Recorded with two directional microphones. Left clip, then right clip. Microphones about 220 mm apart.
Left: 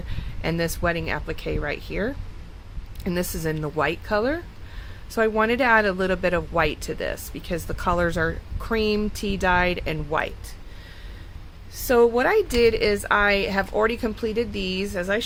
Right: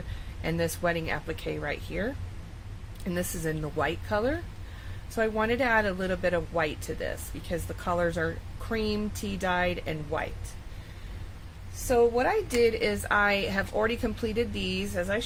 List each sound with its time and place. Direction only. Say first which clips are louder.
0.4 s speech: left 4 dB; 25° left (ahead or behind)
11.9 s speech: left 5 dB; 40° left (ahead or behind); by 15.2 s 25° left (ahead or behind)